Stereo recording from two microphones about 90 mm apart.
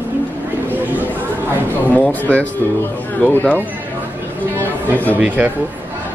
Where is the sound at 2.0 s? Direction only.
15° left (ahead or behind).